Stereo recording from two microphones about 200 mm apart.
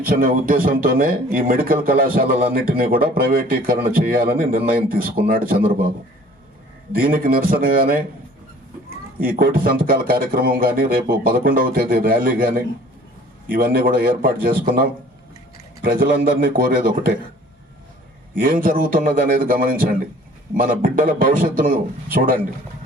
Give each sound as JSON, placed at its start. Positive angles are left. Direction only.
{"t": 0.0, "sound": "speech", "side_deg": -45}
{"t": 6.9, "sound": "speech", "side_deg": -45}
{"t": 9.1, "sound": "speech", "side_deg": -45}
{"t": 18.3, "sound": "speech", "side_deg": -45}